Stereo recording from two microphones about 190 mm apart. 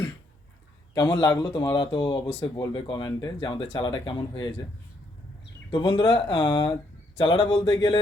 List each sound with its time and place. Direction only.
0.9 s speech: 15° left (ahead or behind)
5.7 s speech: 25° left (ahead or behind)